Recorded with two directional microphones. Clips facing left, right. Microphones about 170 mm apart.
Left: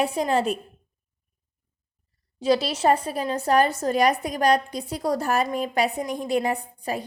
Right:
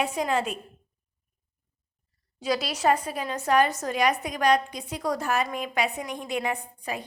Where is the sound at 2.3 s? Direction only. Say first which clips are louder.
Left 6 dB; 30° left (ahead or behind).